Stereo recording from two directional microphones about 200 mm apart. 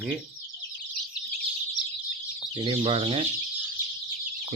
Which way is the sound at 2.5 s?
25° right (ahead or behind).